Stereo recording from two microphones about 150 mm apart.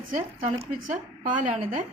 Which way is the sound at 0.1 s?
50° right (ahead or behind).